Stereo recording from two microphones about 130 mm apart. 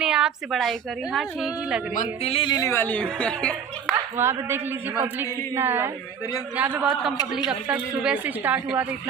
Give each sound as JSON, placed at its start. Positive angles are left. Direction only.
{"t": 0.0, "sound": "a woman's voice", "side_deg": -5}
{"t": 2.2, "sound": "speech", "side_deg": 45}
{"t": 2.5, "sound": "a woman's voice", "side_deg": 25}
{"t": 4.2, "sound": "a woman's voice", "side_deg": -20}